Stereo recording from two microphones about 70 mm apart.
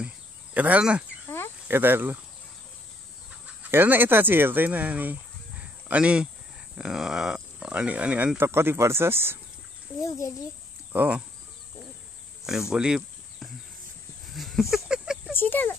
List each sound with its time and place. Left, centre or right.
0.6 s speech: centre
1.7 s speech: right
3.7 s speech: right
8.4 s speech: right
9.9 s a child's voice: left
10.9 s speech: right
12.7 s speech: centre
14.3 s a sound: centre
15.3 s a sound: left